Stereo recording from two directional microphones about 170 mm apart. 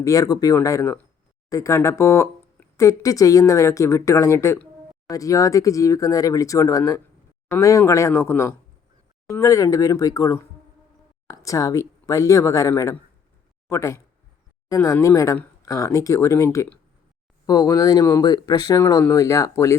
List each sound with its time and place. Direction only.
0.0 s speech: 20° left (ahead or behind)